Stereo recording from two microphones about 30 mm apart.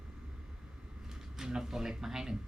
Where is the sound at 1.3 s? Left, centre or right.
Centre.